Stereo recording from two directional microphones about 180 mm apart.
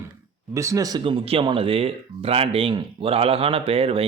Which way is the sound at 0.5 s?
15° right (ahead or behind).